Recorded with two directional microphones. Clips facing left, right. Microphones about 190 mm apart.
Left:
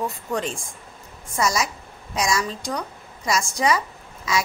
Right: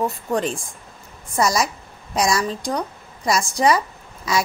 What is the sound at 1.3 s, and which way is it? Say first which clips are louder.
A woman's voice: right 3 dB; 35° right (ahead or behind).